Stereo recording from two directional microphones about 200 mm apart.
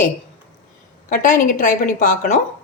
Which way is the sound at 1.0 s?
40° left (ahead or behind).